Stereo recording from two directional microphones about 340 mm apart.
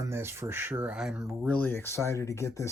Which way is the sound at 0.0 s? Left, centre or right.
Centre.